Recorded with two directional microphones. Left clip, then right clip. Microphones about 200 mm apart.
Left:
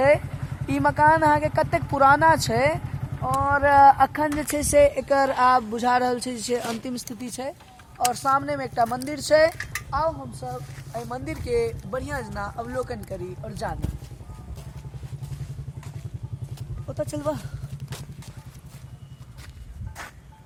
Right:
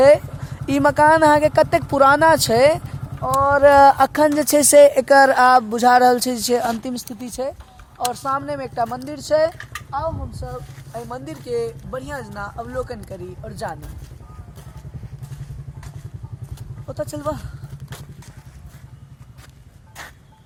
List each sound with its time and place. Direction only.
0.7 s speech: 55° right (ahead or behind); by 7.5 s 25° right (ahead or behind)
7.9 s speech: 15° right (ahead or behind)
9.0 s speech: 5° left (ahead or behind)
10.4 s speech: 10° right (ahead or behind)
16.8 s speech: 5° right (ahead or behind)